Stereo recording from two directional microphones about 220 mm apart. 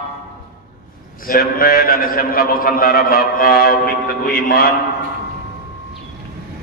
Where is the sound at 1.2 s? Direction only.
40° left (ahead or behind).